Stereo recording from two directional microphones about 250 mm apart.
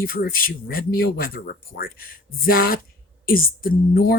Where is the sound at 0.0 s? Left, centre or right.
Left.